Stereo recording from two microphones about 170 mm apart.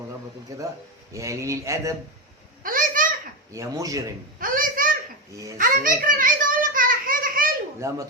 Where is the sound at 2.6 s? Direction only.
55° right (ahead or behind).